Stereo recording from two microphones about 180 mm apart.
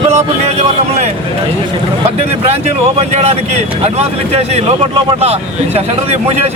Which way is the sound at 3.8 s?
35° right (ahead or behind).